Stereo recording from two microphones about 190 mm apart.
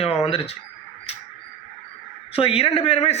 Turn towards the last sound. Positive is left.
turn(degrees=35)  # may be behind; listen again after turning